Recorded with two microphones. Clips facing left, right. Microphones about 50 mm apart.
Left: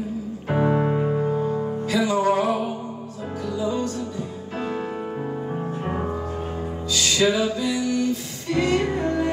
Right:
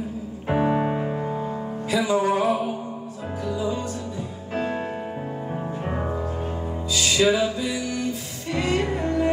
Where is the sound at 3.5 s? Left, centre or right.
Centre.